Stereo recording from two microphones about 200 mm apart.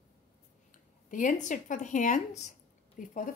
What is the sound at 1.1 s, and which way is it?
A woman's voice, 40° left (ahead or behind).